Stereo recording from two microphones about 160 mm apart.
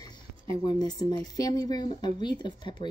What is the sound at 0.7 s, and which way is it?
Speech, 25° left (ahead or behind).